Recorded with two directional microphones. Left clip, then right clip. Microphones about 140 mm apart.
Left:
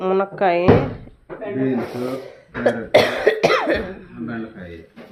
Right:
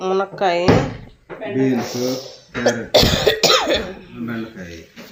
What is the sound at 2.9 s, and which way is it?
Speech, 5° left (ahead or behind).